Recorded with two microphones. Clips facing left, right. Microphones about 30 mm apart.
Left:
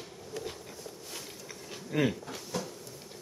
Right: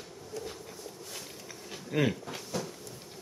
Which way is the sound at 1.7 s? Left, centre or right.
Centre.